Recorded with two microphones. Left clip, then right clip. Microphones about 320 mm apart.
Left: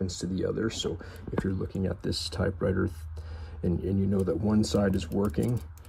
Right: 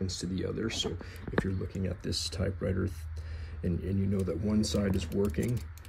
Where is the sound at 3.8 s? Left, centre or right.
Centre.